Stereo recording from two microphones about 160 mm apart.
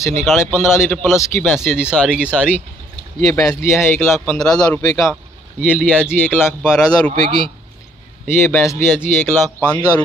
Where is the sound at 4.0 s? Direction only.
5° left (ahead or behind).